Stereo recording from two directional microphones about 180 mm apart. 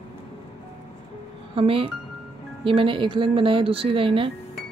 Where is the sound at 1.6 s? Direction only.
30° right (ahead or behind).